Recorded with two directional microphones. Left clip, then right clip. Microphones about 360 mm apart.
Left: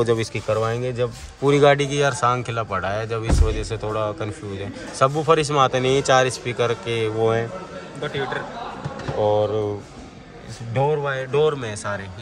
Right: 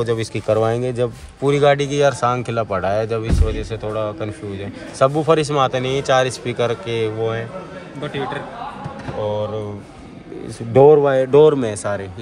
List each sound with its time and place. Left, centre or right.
0.0 s a man's voice: centre
8.0 s speech: right
10.7 s speech: centre